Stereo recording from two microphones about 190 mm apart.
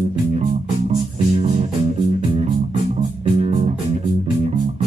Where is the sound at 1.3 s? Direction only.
35° right (ahead or behind).